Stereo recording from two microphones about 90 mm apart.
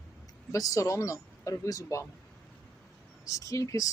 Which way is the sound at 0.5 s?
40° left (ahead or behind).